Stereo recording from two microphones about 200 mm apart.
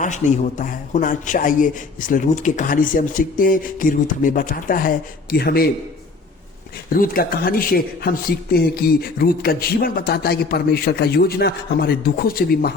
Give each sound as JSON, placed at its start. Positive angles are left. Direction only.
{"t": 0.0, "sound": "speech", "side_deg": 40}
{"t": 6.9, "sound": "speech", "side_deg": 45}